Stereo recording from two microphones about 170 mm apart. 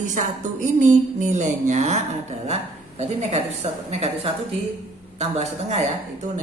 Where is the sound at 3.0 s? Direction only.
40° right (ahead or behind).